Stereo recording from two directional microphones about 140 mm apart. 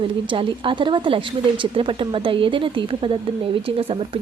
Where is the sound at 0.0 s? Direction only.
35° right (ahead or behind).